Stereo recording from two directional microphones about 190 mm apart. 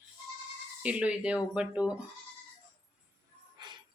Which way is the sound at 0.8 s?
5° right (ahead or behind).